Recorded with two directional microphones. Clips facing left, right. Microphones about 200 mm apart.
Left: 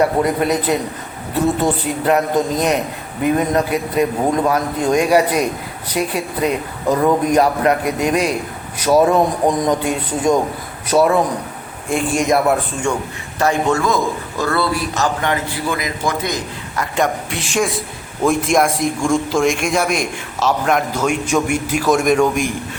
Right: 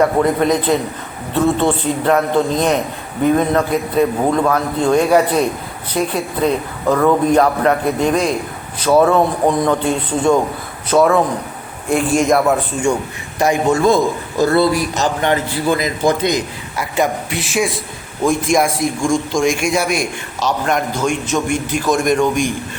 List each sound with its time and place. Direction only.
0.2 s a man's voice: 10° left (ahead or behind)
11.9 s a man's voice: centre (ahead or behind)
13.4 s a man's voice: 15° right (ahead or behind)
16.9 s a man's voice: 5° right (ahead or behind)